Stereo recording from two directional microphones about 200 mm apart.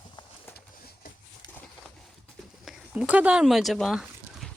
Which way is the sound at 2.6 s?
5° right (ahead or behind).